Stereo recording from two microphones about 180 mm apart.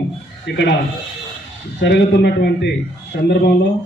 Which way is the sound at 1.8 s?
70° left (ahead or behind).